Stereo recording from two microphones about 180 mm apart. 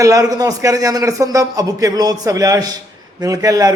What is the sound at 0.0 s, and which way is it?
A man's voice, 20° right (ahead or behind).